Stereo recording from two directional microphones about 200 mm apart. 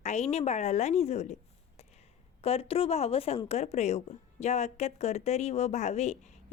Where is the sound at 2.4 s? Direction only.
30° left (ahead or behind).